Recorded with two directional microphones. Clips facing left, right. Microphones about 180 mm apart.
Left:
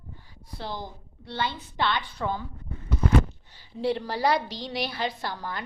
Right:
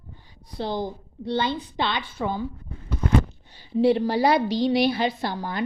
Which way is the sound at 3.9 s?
15° right (ahead or behind).